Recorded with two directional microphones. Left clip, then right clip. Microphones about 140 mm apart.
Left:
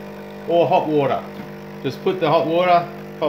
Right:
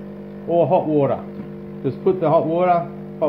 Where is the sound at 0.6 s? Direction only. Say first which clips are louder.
Even; 35° right (ahead or behind).